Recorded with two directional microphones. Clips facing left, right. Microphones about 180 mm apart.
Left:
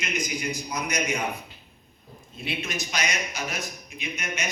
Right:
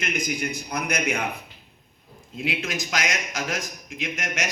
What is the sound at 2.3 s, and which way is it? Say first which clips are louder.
A man's voice: right 3 dB; 90° right.